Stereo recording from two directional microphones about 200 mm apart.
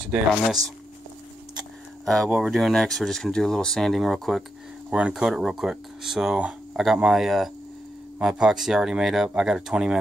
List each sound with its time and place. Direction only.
0.3 s speech: centre (ahead or behind)
2.0 s speech: centre (ahead or behind)